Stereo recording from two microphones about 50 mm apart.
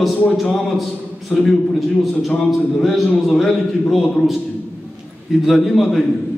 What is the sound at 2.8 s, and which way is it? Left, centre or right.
A man's voice, centre.